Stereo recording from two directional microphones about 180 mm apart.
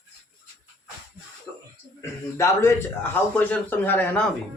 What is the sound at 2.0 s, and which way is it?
A man's voice, 15° left (ahead or behind).